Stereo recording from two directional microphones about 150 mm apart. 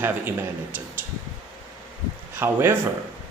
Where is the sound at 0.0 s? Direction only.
15° right (ahead or behind).